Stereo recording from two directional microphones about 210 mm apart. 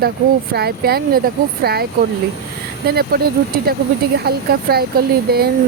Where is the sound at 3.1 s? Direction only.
45° right (ahead or behind).